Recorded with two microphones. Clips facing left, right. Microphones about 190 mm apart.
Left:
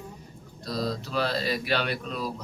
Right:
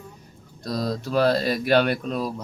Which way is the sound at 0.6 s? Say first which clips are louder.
Right 3 dB; 45° right (ahead or behind).